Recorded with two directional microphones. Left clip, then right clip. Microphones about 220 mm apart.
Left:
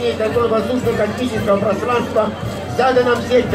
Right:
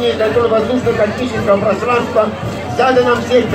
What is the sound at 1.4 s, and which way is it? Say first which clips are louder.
Speech: right 4 dB; 45° left (ahead or behind).